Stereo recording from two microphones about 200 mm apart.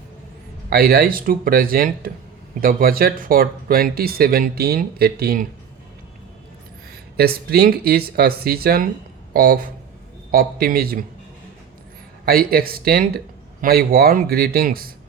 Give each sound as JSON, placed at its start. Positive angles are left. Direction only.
{"t": 0.7, "sound": "speech", "side_deg": -50}
{"t": 7.2, "sound": "speech", "side_deg": -50}
{"t": 12.2, "sound": "speech", "side_deg": -50}